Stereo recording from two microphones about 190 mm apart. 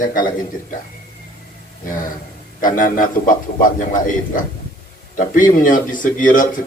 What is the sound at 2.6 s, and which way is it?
A man's voice, 45° left (ahead or behind).